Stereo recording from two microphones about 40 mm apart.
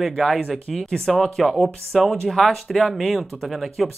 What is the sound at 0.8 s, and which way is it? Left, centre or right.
Speech, centre.